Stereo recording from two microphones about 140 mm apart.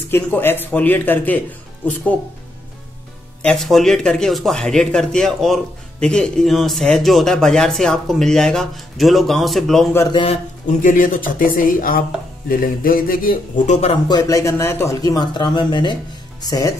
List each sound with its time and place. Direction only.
0.1 s speech: 15° left (ahead or behind)
3.4 s speech: centre (ahead or behind)
10.1 s a man's voice: 45° left (ahead or behind)
10.8 s speech: 75° left (ahead or behind)
12.4 s speech: 90° left
14.0 s speech: 25° left (ahead or behind)